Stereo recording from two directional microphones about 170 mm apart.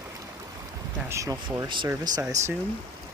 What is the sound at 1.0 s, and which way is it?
Speech, 20° right (ahead or behind).